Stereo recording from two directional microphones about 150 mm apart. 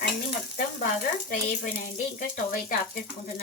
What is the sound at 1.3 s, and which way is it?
Speech, 60° left (ahead or behind).